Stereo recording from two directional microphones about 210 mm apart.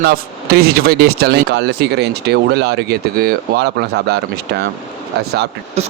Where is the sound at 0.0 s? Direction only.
45° right (ahead or behind).